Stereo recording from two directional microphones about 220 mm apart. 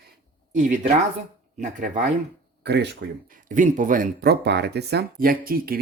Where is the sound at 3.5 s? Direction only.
35° right (ahead or behind).